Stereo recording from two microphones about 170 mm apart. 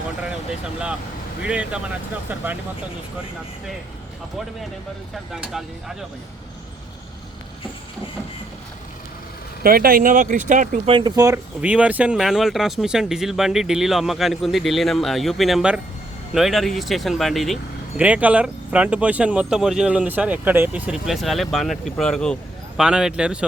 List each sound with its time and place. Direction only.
1.4 s speech: 5° right (ahead or behind)
5.3 s speech: centre (ahead or behind)
9.6 s speech: 60° right (ahead or behind)
10.8 s speech: 30° right (ahead or behind)
11.6 s speech: 10° right (ahead or behind)